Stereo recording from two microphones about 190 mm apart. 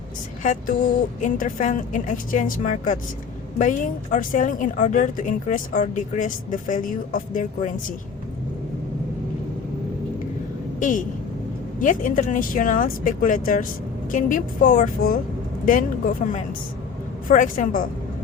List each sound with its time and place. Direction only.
0.4 s a woman's voice: 40° left (ahead or behind)
10.8 s a woman's voice: 45° left (ahead or behind)
17.2 s a woman's voice: 45° left (ahead or behind)